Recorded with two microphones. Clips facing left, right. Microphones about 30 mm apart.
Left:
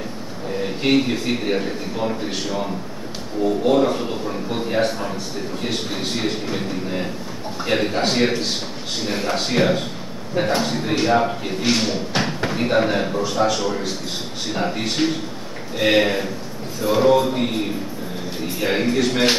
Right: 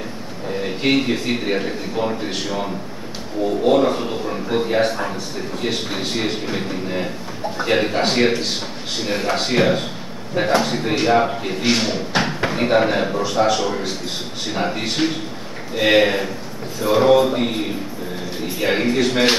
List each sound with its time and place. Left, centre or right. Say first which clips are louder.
0.8 s a man's voice: even; centre
3.6 s a man's voice: right 3 dB; centre
18.6 s a man's voice: right 1 dB; centre